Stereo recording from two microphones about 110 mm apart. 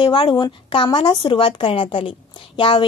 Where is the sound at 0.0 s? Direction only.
45° left (ahead or behind).